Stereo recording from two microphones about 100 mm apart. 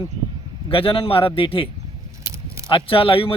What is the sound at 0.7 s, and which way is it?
Speech, 65° left (ahead or behind).